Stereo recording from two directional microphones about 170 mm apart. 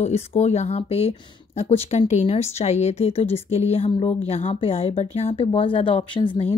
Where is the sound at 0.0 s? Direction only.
40° left (ahead or behind).